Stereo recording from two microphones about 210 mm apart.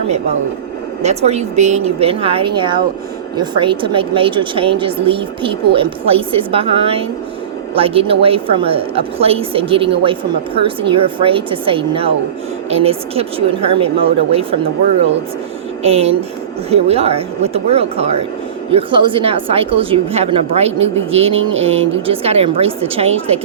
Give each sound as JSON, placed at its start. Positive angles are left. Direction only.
{"t": 1.0, "sound": "a woman's voice", "side_deg": -30}
{"t": 15.8, "sound": "a woman's voice", "side_deg": -30}